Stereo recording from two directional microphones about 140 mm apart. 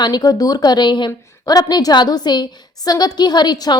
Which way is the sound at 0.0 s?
30° left (ahead or behind).